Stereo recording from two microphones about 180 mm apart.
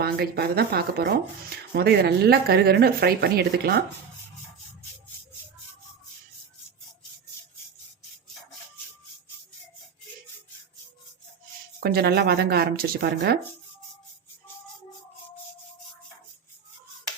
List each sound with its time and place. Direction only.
0.0 s speech: 60° right (ahead or behind)
11.8 s speech: 60° right (ahead or behind)